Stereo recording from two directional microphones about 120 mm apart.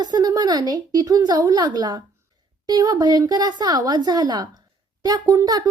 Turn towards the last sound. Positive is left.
turn(degrees=-30)  # may be behind; listen again after turning